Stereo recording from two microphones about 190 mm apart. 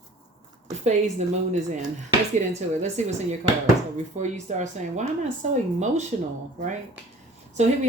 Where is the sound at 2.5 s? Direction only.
35° right (ahead or behind).